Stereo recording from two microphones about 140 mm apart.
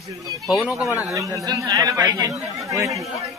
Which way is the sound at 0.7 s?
5° right (ahead or behind).